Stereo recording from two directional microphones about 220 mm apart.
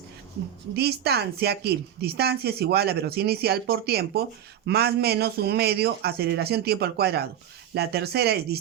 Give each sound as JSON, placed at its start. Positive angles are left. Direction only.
{"t": 0.8, "sound": "a woman's voice", "side_deg": -45}